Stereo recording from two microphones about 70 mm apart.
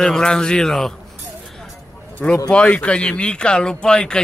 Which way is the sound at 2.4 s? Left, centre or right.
Centre.